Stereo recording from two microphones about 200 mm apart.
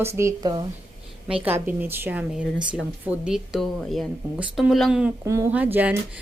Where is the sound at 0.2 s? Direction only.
15° right (ahead or behind).